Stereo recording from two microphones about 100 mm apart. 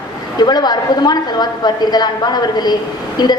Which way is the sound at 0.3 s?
45° left (ahead or behind).